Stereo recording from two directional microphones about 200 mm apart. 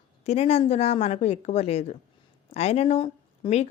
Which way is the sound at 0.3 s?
30° left (ahead or behind).